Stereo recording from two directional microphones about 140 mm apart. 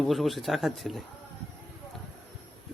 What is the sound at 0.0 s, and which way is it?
Speech, centre (ahead or behind).